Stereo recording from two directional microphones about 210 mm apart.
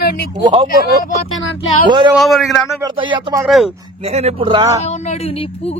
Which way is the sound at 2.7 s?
20° right (ahead or behind).